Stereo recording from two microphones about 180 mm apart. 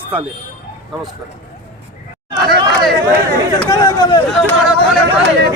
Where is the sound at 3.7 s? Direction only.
20° left (ahead or behind).